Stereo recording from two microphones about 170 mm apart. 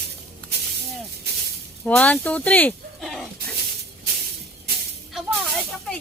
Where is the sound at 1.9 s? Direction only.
5° left (ahead or behind).